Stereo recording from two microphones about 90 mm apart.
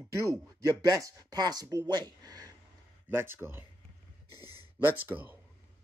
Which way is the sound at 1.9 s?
45° right (ahead or behind).